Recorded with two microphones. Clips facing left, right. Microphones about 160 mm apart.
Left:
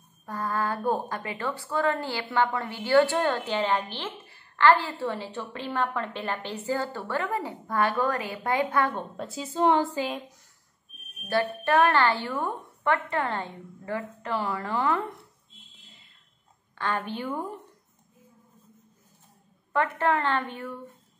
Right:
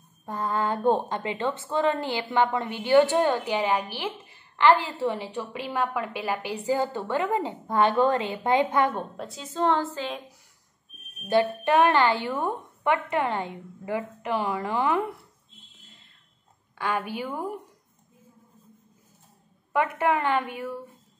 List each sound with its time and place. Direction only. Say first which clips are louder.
0.2 s a woman's voice: right 2 dB; 20° right (ahead or behind)
9.1 s a woman's voice: left 2 dB; centre (ahead or behind)
11.2 s a woman's voice: right 3 dB; 20° right (ahead or behind)
16.7 s a woman's voice: right 1 dB; 10° right (ahead or behind)
19.7 s a woman's voice: right 1 dB; 10° right (ahead or behind)